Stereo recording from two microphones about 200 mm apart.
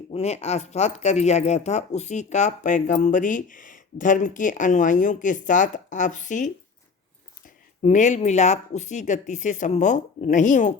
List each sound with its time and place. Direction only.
0.1 s speech: 30° left (ahead or behind)